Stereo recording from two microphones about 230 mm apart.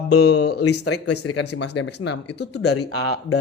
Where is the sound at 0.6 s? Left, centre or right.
Left.